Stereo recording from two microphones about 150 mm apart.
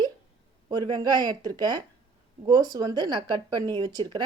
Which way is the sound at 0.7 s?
25° right (ahead or behind).